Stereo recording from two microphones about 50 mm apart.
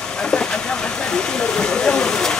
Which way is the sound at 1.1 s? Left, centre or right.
Centre.